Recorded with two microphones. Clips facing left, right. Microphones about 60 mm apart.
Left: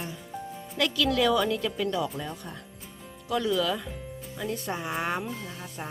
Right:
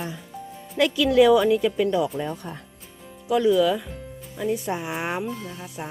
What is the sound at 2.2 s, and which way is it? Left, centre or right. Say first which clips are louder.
Speech: right 7 dB; right.